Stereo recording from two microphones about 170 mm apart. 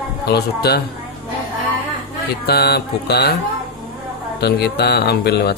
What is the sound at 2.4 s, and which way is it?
Speech, 70° left (ahead or behind).